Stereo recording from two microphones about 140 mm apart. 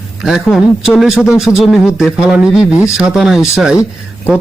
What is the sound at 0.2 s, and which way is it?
A man's voice, 5° right (ahead or behind).